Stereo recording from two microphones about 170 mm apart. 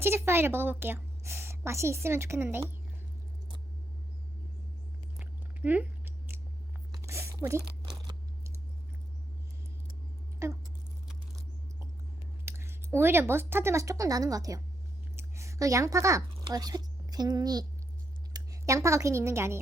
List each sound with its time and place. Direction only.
0.0 s a woman's voice: 15° right (ahead or behind)
5.1 s chewing: 10° right (ahead or behind)
6.9 s a sound: 15° right (ahead or behind)
10.4 s speech: 15° right (ahead or behind)
12.5 s a woman's voice: 15° right (ahead or behind)